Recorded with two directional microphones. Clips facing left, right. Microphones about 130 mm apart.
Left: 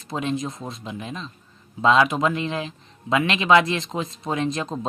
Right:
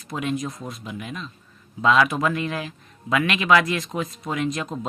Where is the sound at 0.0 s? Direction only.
25° left (ahead or behind).